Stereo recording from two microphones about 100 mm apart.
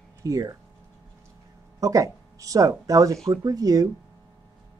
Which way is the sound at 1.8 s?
35° right (ahead or behind).